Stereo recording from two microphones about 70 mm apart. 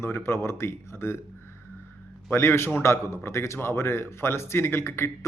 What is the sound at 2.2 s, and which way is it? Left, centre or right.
Speech, left.